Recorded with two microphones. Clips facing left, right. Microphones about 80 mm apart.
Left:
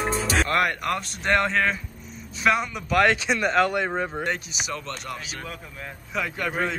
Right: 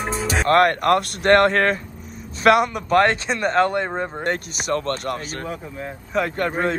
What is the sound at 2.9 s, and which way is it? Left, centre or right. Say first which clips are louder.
Speech: right 1 dB; right.